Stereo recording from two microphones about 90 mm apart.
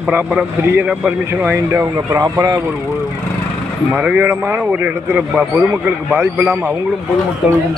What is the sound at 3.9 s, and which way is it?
Speech, 20° right (ahead or behind).